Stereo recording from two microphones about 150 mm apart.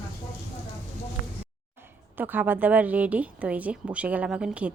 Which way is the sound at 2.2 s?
10° right (ahead or behind).